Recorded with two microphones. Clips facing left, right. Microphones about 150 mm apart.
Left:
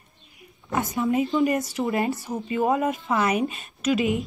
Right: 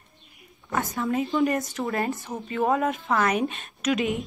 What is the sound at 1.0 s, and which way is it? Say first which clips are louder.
A woman's voice: left 2 dB; centre (ahead or behind).